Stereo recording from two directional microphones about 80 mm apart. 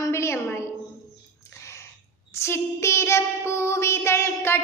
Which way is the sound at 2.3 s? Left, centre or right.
Left.